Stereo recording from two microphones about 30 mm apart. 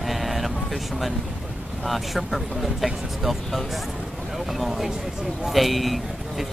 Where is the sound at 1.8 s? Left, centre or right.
Centre.